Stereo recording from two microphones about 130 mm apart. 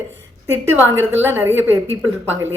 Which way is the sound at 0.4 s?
20° right (ahead or behind).